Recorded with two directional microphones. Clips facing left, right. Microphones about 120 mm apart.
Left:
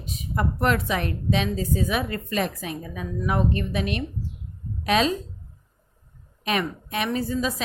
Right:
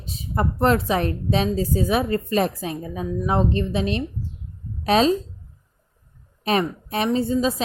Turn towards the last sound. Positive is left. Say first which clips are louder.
# right 5 dB
turn(degrees=-30)  # may be behind; listen again after turning